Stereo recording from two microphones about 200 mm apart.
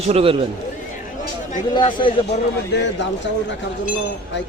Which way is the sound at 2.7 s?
60° left (ahead or behind).